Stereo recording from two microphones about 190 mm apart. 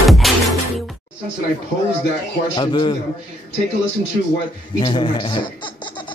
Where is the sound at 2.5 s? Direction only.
25° left (ahead or behind).